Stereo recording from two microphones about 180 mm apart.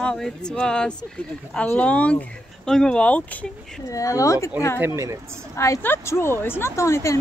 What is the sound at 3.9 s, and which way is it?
Speech, 20° left (ahead or behind).